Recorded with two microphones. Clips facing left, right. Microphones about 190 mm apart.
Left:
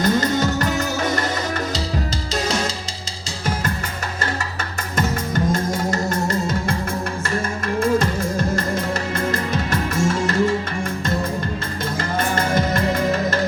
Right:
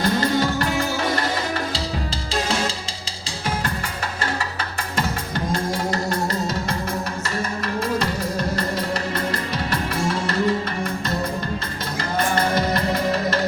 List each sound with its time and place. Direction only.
0.0 s music: 45° left (ahead or behind)
4.9 s music: 45° left (ahead or behind)
7.8 s music: 50° left (ahead or behind)
12.3 s music: 45° left (ahead or behind)